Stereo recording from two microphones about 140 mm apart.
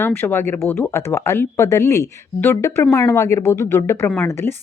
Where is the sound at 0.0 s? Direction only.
15° left (ahead or behind).